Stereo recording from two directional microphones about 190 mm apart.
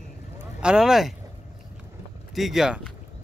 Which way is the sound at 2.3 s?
Centre (ahead or behind).